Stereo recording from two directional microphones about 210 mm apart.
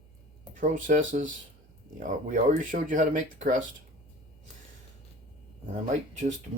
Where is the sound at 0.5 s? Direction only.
40° right (ahead or behind).